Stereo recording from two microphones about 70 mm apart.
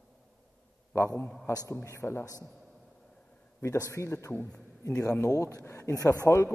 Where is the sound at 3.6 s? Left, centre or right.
Left.